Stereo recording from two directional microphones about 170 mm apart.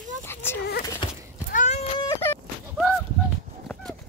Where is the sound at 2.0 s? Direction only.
20° left (ahead or behind).